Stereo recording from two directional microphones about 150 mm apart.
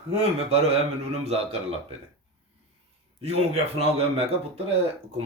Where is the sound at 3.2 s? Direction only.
45° right (ahead or behind).